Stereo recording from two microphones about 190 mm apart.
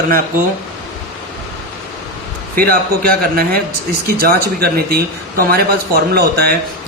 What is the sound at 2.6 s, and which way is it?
A man's voice, 55° right (ahead or behind).